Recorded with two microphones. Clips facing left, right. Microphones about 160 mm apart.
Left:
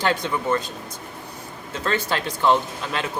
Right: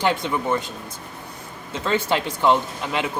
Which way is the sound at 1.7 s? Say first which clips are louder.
Right 2 dB; 15° right (ahead or behind).